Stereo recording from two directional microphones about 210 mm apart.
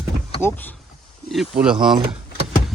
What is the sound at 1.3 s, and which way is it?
Speech, centre (ahead or behind).